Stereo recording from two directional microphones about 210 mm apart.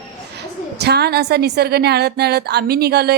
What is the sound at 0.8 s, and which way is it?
A woman's voice, 50° right (ahead or behind).